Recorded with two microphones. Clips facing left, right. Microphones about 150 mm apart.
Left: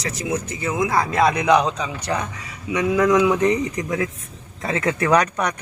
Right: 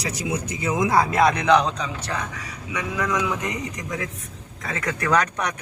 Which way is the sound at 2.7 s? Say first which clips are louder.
Left 9 dB; 30° left (ahead or behind).